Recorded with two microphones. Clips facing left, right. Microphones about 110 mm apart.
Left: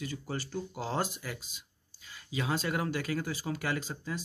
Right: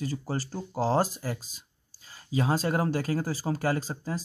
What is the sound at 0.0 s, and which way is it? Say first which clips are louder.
Speech: right 5 dB; 35° right (ahead or behind).